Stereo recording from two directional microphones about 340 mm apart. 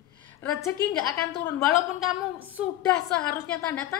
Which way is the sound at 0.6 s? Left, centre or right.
Centre.